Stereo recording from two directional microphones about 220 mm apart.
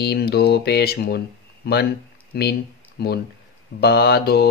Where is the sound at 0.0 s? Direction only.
45° left (ahead or behind).